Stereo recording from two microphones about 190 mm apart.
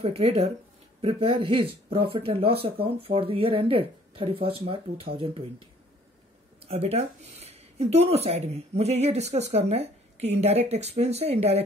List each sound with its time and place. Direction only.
0.0 s speech: 30° right (ahead or behind)
6.7 s speech: 30° right (ahead or behind)